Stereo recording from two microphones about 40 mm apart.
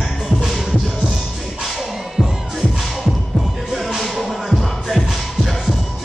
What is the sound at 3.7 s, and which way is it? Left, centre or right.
Music, centre.